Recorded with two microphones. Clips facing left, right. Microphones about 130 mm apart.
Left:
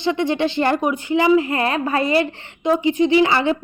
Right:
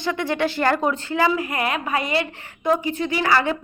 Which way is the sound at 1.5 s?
35° left (ahead or behind).